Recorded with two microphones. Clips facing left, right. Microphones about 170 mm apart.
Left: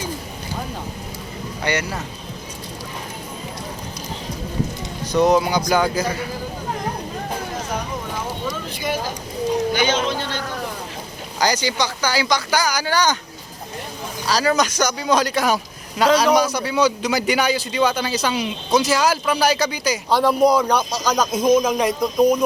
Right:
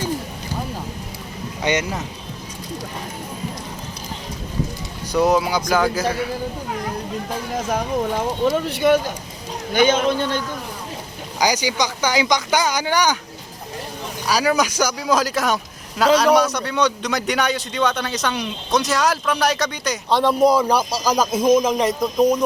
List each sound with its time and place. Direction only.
1.6 s speech: 20° right (ahead or behind)
5.1 s a man's voice: 5° right (ahead or behind)
8.4 s speech: 65° right (ahead or behind)
9.7 s speech: 50° right (ahead or behind)
11.3 s speech: 10° right (ahead or behind)
14.3 s a man's voice: 10° right (ahead or behind)